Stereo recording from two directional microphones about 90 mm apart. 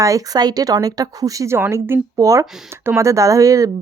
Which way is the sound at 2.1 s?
35° right (ahead or behind).